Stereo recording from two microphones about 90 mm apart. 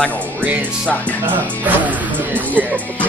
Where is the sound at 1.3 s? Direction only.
20° right (ahead or behind).